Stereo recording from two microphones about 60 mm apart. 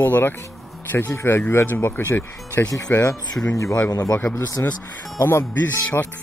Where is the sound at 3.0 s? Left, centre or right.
Left.